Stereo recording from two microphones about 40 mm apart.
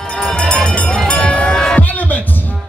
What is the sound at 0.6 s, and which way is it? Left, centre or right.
Music, left.